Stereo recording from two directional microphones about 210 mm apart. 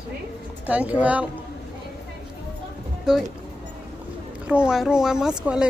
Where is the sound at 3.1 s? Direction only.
5° right (ahead or behind).